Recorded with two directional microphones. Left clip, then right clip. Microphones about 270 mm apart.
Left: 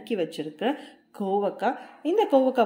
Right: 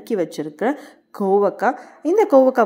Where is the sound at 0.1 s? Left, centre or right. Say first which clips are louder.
Right 6 dB; right.